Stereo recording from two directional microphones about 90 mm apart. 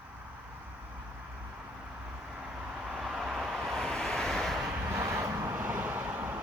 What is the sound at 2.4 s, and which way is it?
Vehicle, 10° right (ahead or behind).